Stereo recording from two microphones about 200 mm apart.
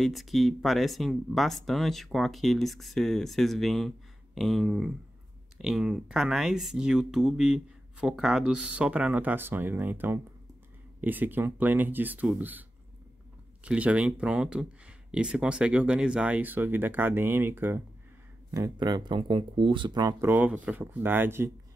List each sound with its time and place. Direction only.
0.0 s speech: centre (ahead or behind)
13.7 s speech: 5° right (ahead or behind)